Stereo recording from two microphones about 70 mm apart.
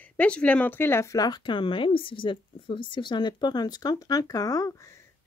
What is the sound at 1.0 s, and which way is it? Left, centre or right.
Speech, left.